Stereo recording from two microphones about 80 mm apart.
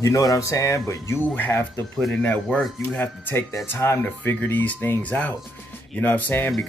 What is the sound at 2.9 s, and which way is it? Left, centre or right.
Speech, left.